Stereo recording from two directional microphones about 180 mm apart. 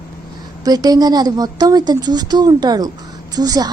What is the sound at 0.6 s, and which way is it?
A woman's voice, 20° right (ahead or behind).